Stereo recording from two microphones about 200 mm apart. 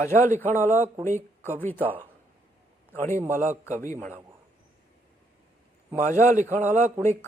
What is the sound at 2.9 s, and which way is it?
Speech, 10° left (ahead or behind).